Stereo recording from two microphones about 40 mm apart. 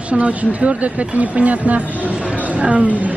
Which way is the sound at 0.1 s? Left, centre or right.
Right.